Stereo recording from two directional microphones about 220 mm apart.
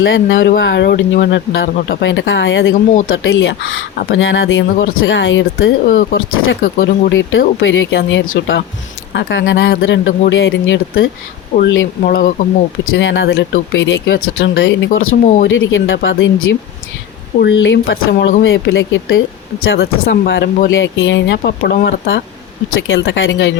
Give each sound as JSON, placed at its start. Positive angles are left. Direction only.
{"t": 0.0, "sound": "speech", "side_deg": 60}
{"t": 5.9, "sound": "speech", "side_deg": 40}
{"t": 6.1, "sound": "speech", "side_deg": 65}
{"t": 12.0, "sound": "speech", "side_deg": 40}
{"t": 12.9, "sound": "speech", "side_deg": 60}
{"t": 15.1, "sound": "speech", "side_deg": 40}
{"t": 15.4, "sound": "speech", "side_deg": 60}